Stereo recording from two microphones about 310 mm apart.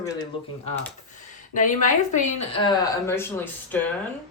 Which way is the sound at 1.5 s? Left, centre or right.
Left.